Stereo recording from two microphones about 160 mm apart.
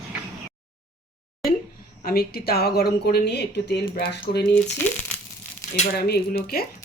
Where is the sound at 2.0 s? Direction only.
70° left (ahead or behind).